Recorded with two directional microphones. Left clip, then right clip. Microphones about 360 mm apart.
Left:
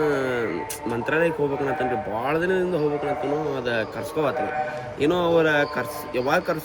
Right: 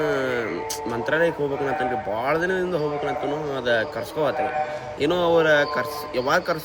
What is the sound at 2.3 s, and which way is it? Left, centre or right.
Speech, centre.